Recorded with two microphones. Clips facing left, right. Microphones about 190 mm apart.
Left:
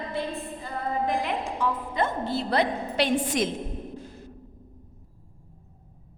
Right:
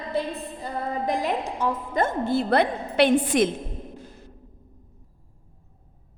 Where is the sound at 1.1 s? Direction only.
40° right (ahead or behind); by 3.5 s 60° right (ahead or behind).